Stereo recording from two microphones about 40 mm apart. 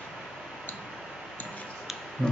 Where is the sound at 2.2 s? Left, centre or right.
Centre.